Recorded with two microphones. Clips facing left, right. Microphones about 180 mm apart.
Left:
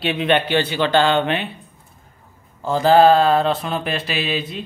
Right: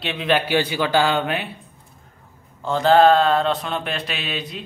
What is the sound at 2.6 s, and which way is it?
A man's voice, 5° left (ahead or behind).